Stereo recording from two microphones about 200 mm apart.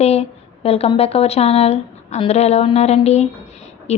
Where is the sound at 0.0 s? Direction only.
30° left (ahead or behind).